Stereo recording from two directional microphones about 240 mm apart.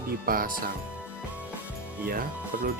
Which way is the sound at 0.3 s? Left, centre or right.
Right.